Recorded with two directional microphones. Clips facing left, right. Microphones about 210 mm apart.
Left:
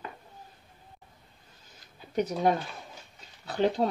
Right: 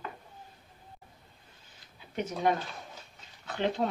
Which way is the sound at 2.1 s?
40° left (ahead or behind).